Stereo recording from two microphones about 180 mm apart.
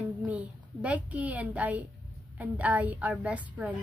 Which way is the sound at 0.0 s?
10° right (ahead or behind).